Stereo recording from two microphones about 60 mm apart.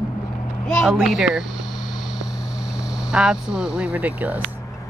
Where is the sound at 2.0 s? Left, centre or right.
Centre; by 4.4 s right.